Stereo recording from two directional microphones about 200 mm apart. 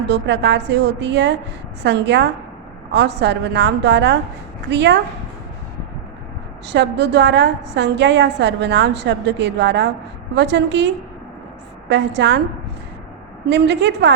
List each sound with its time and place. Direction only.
0.1 s a woman's voice: 60° right (ahead or behind)
6.7 s a woman's voice: 60° right (ahead or behind)
13.5 s a woman's voice: 60° right (ahead or behind)